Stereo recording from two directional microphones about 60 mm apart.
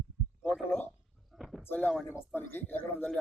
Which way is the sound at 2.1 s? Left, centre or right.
Left.